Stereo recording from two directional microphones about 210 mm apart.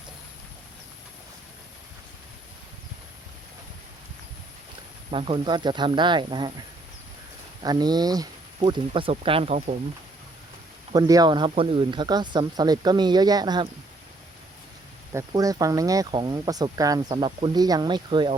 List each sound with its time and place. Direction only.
5.1 s speech: 25° right (ahead or behind)
7.6 s speech: 20° right (ahead or behind)
10.9 s speech: 15° right (ahead or behind)
15.1 s speech: 15° right (ahead or behind)